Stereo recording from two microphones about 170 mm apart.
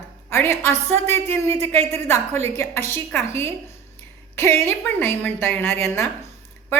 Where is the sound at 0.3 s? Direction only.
15° left (ahead or behind).